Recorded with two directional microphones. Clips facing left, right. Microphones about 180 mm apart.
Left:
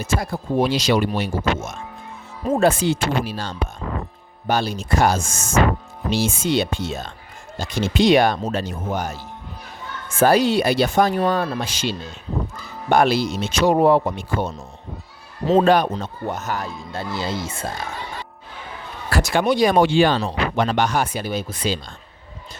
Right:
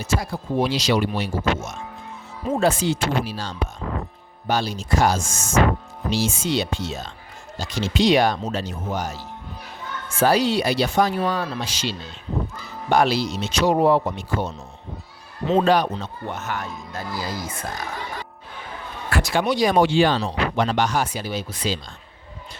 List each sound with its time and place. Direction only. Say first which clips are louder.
0.0 s speech: left 1 dB; 55° left (ahead or behind)
10.2 s speech: left 3 dB; 50° left (ahead or behind); by 17.8 s 25° left (ahead or behind)
19.1 s speech: left 3 dB; 50° left (ahead or behind)